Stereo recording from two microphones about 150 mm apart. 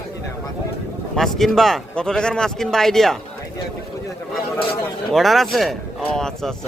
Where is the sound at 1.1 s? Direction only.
Centre (ahead or behind).